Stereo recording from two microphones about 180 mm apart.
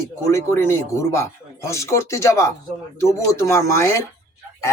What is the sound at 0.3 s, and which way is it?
Speech, 15° left (ahead or behind).